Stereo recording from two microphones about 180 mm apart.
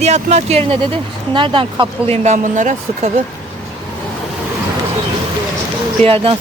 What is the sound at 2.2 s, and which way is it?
Speech, 45° right (ahead or behind).